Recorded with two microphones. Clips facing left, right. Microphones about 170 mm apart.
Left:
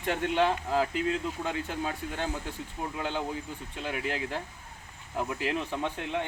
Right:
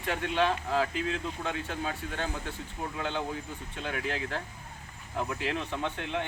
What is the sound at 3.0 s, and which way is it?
Speech, 10° left (ahead or behind).